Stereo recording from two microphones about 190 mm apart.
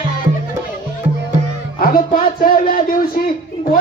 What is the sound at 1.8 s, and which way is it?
Music, 50° left (ahead or behind).